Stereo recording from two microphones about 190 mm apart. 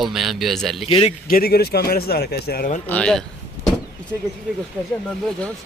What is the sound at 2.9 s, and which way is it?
Speech, 5° left (ahead or behind).